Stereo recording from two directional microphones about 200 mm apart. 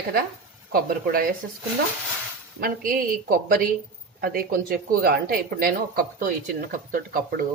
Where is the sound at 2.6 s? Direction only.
45° right (ahead or behind).